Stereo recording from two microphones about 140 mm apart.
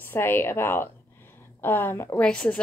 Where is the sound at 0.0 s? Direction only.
15° left (ahead or behind).